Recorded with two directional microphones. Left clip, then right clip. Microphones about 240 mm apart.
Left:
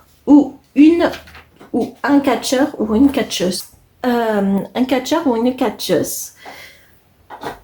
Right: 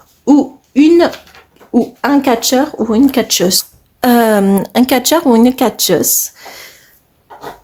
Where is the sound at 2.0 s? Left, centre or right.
Right.